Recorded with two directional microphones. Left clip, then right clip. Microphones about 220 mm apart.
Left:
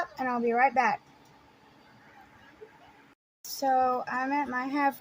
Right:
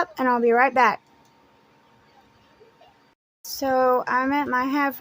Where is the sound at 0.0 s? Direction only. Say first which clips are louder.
Right 9 dB; 40° right (ahead or behind).